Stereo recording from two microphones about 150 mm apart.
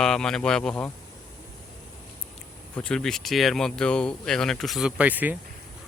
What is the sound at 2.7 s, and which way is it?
Speech, 10° left (ahead or behind).